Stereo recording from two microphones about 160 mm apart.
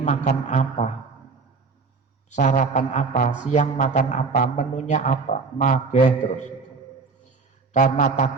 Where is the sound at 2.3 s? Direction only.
50° left (ahead or behind).